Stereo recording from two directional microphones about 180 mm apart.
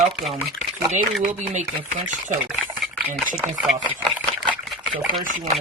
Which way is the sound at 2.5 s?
Centre (ahead or behind).